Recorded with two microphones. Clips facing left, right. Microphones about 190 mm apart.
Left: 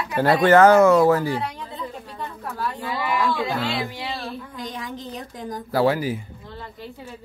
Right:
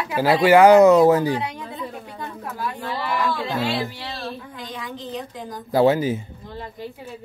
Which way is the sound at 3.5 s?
20° right (ahead or behind).